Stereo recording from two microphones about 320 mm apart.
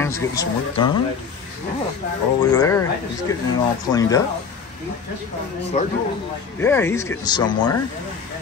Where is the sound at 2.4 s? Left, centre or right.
Centre.